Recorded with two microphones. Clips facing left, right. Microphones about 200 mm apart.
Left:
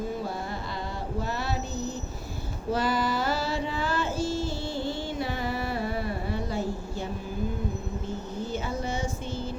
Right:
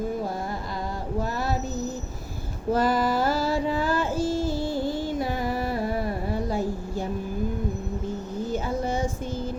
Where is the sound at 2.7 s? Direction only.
50° right (ahead or behind).